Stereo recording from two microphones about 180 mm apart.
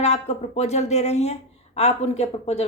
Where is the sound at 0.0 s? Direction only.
35° left (ahead or behind).